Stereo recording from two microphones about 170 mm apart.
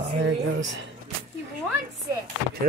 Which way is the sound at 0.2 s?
90° right.